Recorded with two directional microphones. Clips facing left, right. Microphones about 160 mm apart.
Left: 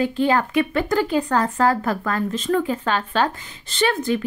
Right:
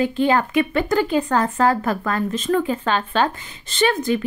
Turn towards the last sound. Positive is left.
turn(degrees=-20)  # may be behind; listen again after turning